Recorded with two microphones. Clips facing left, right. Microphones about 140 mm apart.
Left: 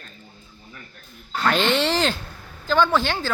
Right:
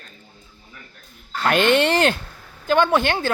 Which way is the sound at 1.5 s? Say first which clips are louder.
Right 6 dB; 55° right (ahead or behind).